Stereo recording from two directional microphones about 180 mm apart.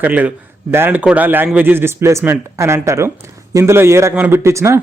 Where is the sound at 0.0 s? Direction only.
10° right (ahead or behind).